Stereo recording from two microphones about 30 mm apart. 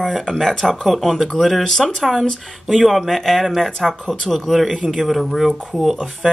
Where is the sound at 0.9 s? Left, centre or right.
Centre.